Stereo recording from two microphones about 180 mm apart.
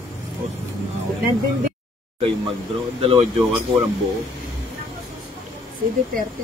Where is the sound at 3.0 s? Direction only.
35° right (ahead or behind).